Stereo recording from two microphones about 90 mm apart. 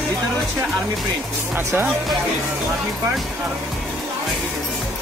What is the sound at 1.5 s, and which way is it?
Speech, 25° right (ahead or behind).